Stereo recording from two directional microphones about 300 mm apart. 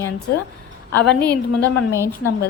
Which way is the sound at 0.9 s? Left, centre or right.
Centre.